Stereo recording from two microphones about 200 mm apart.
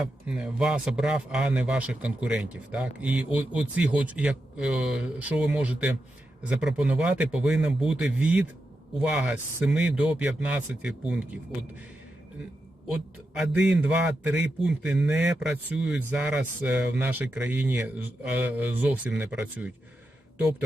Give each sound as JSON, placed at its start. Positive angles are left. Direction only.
{"t": 0.0, "sound": "a man's voice", "side_deg": -5}
{"t": 13.3, "sound": "a man's voice", "side_deg": -5}